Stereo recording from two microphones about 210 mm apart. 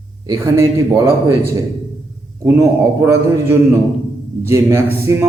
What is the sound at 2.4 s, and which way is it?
Speech, 15° right (ahead or behind).